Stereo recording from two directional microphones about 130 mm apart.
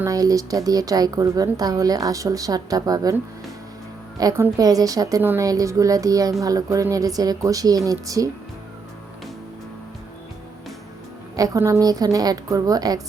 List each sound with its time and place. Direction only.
0.0 s a woman's voice: 25° right (ahead or behind)
4.2 s a woman's voice: 30° right (ahead or behind)
11.3 s a woman's voice: 25° right (ahead or behind)